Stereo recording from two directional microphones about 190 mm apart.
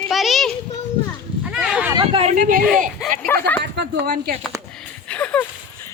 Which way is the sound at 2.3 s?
45° right (ahead or behind).